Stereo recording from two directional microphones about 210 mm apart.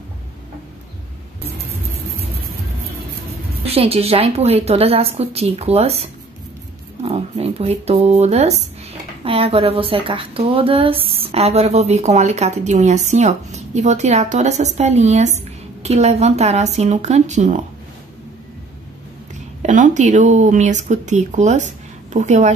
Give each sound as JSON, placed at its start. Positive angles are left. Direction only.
{"t": 3.6, "sound": "a woman's voice", "side_deg": -30}
{"t": 19.6, "sound": "a woman's voice", "side_deg": -35}